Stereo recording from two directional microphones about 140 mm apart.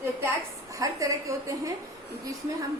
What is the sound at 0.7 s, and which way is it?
Speech, 25° right (ahead or behind).